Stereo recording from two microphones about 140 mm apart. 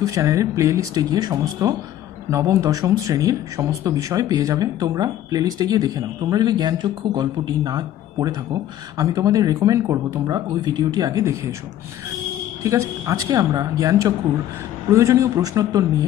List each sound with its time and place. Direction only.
0.0 s speech: 25° right (ahead or behind)
12.6 s speech: 25° right (ahead or behind)